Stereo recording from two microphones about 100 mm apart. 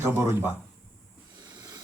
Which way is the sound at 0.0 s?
20° right (ahead or behind).